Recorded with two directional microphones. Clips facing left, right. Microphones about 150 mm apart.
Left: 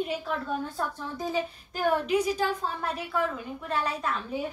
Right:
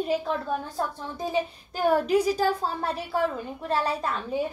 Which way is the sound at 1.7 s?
35° right (ahead or behind).